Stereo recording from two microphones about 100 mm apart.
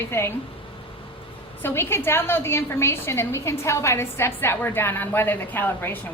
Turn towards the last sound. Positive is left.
turn(degrees=20)  # may be behind; listen again after turning